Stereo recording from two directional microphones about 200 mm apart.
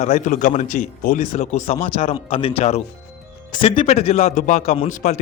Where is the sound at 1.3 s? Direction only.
30° left (ahead or behind).